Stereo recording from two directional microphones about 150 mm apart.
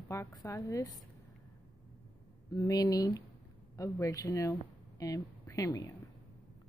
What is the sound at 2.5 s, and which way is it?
A woman's voice, 25° left (ahead or behind).